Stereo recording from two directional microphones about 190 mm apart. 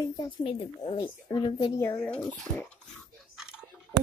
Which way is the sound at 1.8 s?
10° left (ahead or behind).